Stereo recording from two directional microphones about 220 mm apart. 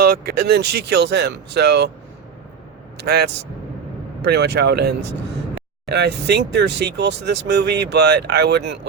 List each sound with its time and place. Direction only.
0.0 s speech: 45° right (ahead or behind)
3.0 s speech: 45° right (ahead or behind)